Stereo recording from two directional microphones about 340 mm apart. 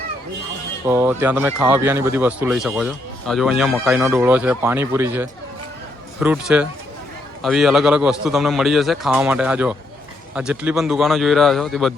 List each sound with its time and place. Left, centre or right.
0.9 s speech: centre